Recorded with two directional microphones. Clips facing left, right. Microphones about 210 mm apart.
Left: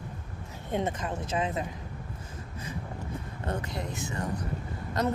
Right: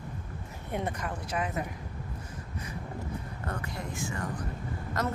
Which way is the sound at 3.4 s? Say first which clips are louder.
Left 5 dB; 20° left (ahead or behind).